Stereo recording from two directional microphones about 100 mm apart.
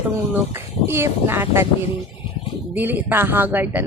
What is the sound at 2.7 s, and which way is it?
Speech, 20° right (ahead or behind).